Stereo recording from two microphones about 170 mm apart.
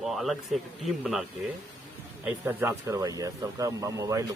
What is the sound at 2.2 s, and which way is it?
Speech, 10° right (ahead or behind).